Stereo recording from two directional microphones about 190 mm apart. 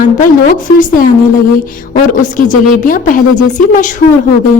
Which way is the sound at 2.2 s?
45° left (ahead or behind).